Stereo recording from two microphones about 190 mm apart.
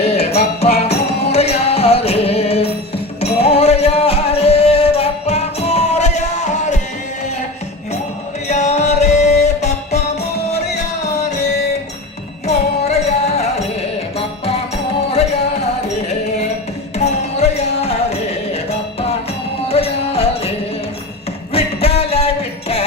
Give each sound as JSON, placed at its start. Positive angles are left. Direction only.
{"t": 0.0, "sound": "music", "side_deg": 35}
{"t": 8.4, "sound": "music", "side_deg": 35}
{"t": 12.5, "sound": "music", "side_deg": 35}
{"t": 17.0, "sound": "music", "side_deg": 35}
{"t": 19.6, "sound": "music", "side_deg": 30}
{"t": 21.5, "sound": "music", "side_deg": 30}